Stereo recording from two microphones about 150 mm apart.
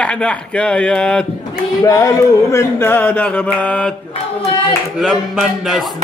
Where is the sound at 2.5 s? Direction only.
15° left (ahead or behind).